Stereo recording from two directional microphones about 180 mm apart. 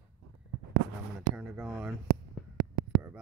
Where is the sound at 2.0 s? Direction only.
55° right (ahead or behind).